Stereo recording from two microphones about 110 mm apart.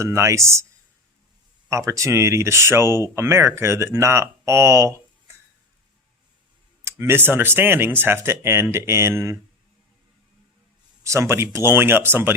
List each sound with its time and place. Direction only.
0.0 s speech: 25° right (ahead or behind)
1.7 s speech: 30° right (ahead or behind)
6.8 s speech: 20° right (ahead or behind)
11.0 s speech: 25° right (ahead or behind)